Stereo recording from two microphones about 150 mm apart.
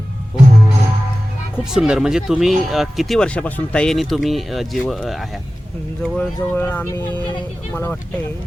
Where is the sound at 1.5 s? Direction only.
5° right (ahead or behind).